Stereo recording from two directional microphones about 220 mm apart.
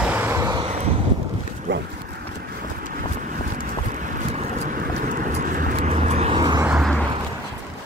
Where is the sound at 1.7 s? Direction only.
55° right (ahead or behind).